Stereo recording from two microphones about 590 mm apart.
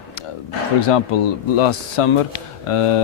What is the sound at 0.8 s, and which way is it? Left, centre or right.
Speech, left.